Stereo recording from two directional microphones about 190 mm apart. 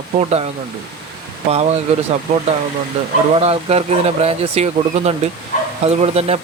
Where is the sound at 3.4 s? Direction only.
35° right (ahead or behind).